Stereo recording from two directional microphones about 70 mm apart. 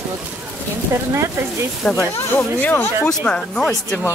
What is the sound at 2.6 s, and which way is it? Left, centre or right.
Speech, left.